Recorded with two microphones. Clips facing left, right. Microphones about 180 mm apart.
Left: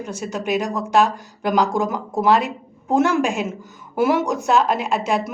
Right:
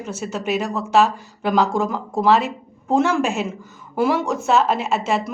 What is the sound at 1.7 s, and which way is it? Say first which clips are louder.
A woman's voice: even; centre (ahead or behind).